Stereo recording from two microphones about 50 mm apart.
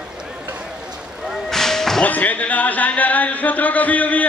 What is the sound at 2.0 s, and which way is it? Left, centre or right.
A man's voice, left.